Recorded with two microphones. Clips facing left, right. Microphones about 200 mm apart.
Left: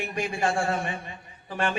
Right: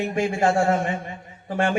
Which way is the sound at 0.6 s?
45° right (ahead or behind).